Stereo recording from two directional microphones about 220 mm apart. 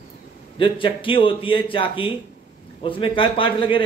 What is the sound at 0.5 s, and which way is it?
A man's voice, 25° left (ahead or behind).